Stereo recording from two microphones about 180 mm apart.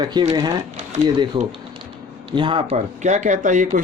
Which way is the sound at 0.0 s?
25° right (ahead or behind).